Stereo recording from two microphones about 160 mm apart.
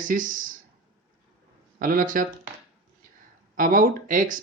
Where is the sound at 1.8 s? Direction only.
60° right (ahead or behind).